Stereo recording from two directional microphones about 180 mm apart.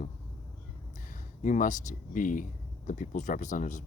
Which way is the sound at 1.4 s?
45° left (ahead or behind).